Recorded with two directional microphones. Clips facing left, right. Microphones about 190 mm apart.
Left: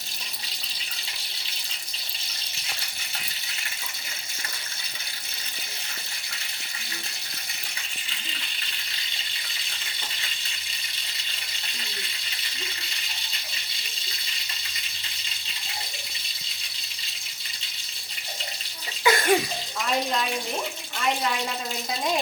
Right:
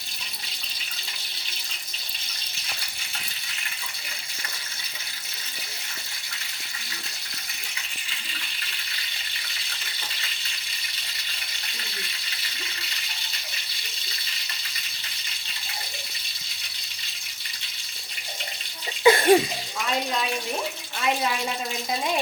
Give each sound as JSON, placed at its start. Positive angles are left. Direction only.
{"t": 19.0, "sound": "bathtub", "side_deg": -30}